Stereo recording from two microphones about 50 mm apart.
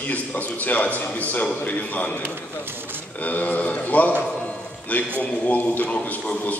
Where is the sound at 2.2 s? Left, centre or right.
Right.